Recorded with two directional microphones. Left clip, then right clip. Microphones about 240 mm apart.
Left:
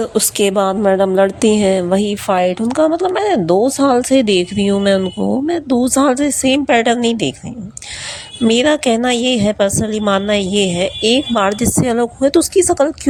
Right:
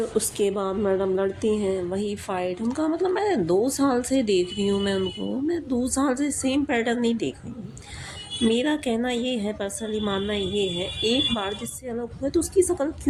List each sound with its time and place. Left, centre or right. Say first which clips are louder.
0.0 s a woman's voice: left 9 dB; left
8.4 s a woman's voice: left 11 dB; left